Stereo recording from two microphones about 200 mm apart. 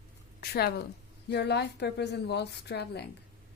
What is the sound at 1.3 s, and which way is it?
A woman's voice, 55° left (ahead or behind).